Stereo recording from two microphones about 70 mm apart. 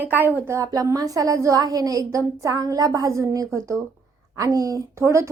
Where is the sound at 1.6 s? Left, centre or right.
Right.